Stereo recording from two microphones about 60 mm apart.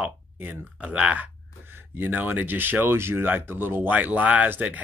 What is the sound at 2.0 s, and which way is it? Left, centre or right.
Speech, right.